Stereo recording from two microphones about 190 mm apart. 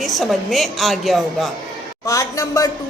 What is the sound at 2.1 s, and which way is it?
Speech, 15° left (ahead or behind).